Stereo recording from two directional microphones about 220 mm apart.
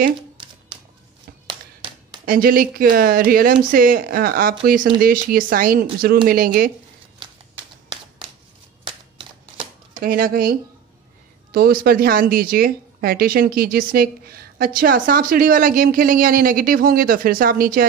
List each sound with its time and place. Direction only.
0.4 s music: 20° right (ahead or behind)
1.5 s a sound: 25° right (ahead or behind)
2.2 s a woman's voice: 40° right (ahead or behind)
8.8 s a sound: 25° right (ahead or behind)
9.9 s a woman's voice: 40° right (ahead or behind)
11.5 s a woman's voice: 45° right (ahead or behind)